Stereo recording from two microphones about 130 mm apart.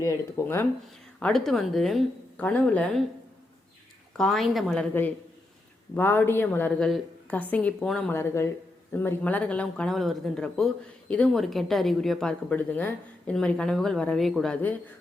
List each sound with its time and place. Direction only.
0.0 s speech: 20° left (ahead or behind)
1.2 s a woman's voice: 5° left (ahead or behind)
4.2 s a woman's voice: centre (ahead or behind)
8.1 s a woman's voice: 20° left (ahead or behind); by 14.5 s centre (ahead or behind)
14.5 s a woman's voice: 15° left (ahead or behind)